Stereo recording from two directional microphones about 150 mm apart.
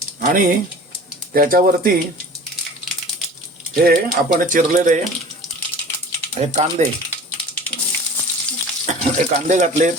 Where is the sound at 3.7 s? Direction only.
85° right; by 5.0 s 60° right (ahead or behind).